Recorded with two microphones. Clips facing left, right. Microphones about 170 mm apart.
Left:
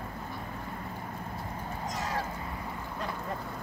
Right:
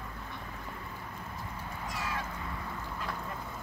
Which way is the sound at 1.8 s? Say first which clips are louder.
Left 3 dB; 40° left (ahead or behind).